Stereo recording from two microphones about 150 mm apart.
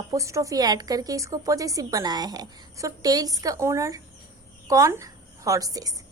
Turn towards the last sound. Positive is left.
turn(degrees=-25)  # may be behind; listen again after turning